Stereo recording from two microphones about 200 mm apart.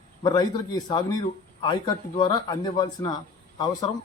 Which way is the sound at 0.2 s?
20° left (ahead or behind).